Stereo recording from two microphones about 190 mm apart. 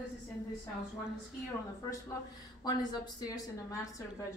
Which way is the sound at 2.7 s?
20° left (ahead or behind).